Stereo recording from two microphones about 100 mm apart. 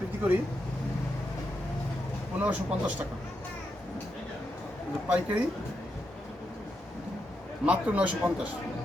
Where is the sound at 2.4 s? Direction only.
15° right (ahead or behind).